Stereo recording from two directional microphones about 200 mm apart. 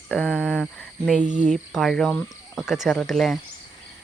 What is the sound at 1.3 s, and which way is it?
Speech, 35° right (ahead or behind).